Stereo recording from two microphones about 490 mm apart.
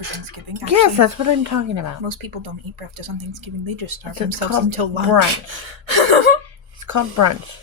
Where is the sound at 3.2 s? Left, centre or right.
Right.